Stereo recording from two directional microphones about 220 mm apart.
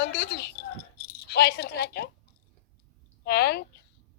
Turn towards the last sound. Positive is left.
turn(degrees=50)  # may be behind; listen again after turning